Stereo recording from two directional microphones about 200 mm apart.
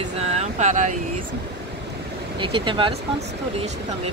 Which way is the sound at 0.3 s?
35° right (ahead or behind).